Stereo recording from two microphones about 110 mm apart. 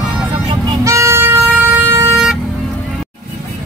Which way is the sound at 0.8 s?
25° right (ahead or behind).